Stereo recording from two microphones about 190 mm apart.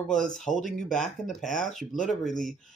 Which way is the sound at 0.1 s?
Centre (ahead or behind).